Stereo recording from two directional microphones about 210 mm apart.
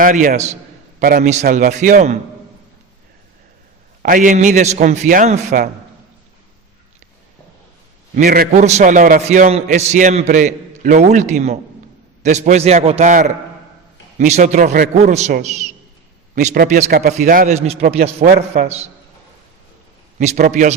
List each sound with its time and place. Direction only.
0.0 s a man's voice: 40° right (ahead or behind)
4.0 s a man's voice: 40° right (ahead or behind)
8.1 s a man's voice: 40° right (ahead or behind)
20.1 s a man's voice: 40° right (ahead or behind)